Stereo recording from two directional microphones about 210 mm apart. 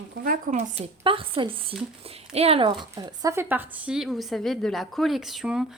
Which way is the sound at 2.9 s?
15° right (ahead or behind).